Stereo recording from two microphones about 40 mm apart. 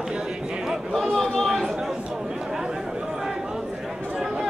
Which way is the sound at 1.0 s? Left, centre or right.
Centre.